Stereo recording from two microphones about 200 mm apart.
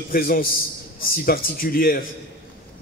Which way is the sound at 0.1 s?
45° left (ahead or behind).